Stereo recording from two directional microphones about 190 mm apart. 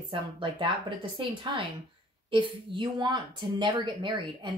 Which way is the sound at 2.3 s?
25° right (ahead or behind).